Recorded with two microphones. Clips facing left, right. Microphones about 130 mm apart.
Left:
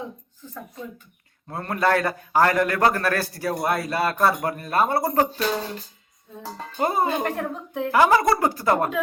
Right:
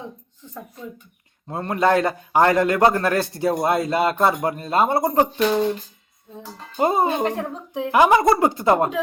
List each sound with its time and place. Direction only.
1.5 s a man's voice: 20° right (ahead or behind)
6.7 s a man's voice: 20° right (ahead or behind)